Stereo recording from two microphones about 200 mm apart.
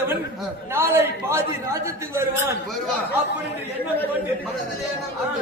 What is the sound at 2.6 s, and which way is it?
Speech, centre (ahead or behind).